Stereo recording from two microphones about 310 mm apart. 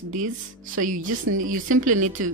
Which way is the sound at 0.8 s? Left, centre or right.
Right.